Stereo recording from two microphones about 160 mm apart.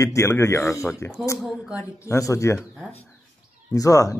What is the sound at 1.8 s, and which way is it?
Speech, 20° left (ahead or behind).